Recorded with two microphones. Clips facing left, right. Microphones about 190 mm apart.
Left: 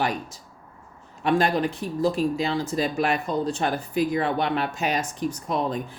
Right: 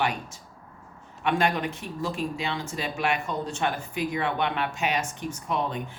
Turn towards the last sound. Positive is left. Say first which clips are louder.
# left 3 dB
turn(degrees=35)  # may be behind; listen again after turning